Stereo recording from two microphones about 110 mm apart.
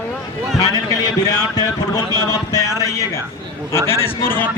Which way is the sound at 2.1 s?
30° left (ahead or behind).